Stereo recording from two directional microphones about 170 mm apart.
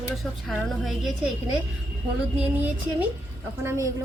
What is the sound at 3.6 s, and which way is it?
Speech, 15° right (ahead or behind).